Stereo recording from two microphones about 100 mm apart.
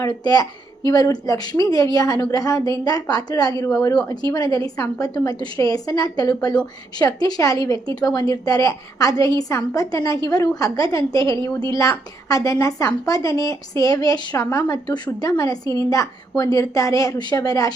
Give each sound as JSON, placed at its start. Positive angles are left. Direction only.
{"t": 0.0, "sound": "a woman's voice", "side_deg": 40}